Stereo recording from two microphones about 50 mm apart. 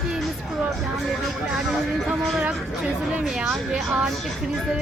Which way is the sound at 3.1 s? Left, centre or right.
Right.